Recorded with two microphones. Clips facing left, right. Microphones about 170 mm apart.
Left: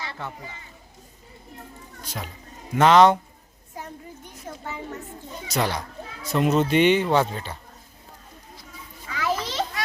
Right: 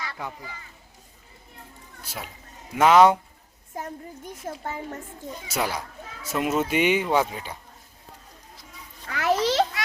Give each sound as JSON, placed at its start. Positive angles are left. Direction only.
{"t": 2.0, "sound": "speech", "side_deg": -5}
{"t": 4.4, "sound": "a woman's voice", "side_deg": -50}
{"t": 5.5, "sound": "speech", "side_deg": -10}
{"t": 9.0, "sound": "a sound", "side_deg": -65}